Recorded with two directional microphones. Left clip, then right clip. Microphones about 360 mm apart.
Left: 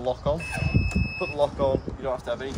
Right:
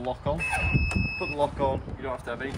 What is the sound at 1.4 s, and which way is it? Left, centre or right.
Speech, centre.